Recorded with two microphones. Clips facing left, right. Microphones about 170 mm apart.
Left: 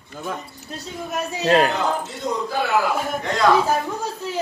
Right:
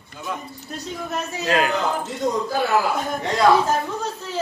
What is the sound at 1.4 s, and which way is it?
Speech, 35° left (ahead or behind).